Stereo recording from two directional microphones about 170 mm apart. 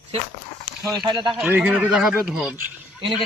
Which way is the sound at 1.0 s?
25° right (ahead or behind).